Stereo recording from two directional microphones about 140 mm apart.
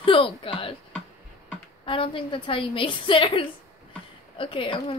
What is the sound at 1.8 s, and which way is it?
A woman's voice, 40° left (ahead or behind).